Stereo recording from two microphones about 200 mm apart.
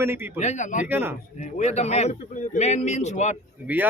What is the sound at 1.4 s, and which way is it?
A man's voice, 35° left (ahead or behind).